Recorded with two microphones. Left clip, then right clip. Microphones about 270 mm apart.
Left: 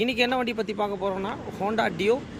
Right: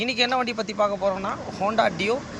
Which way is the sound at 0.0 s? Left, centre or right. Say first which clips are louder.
Right 1 dB; centre.